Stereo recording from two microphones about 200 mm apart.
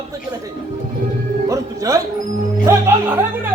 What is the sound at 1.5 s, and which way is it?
A man's voice, 15° right (ahead or behind).